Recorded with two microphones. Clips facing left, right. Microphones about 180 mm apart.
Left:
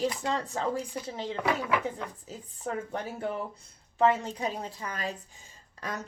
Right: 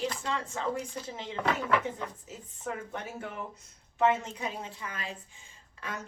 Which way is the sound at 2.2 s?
35° left (ahead or behind).